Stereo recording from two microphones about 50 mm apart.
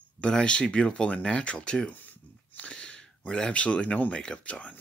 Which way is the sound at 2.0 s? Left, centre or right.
Left.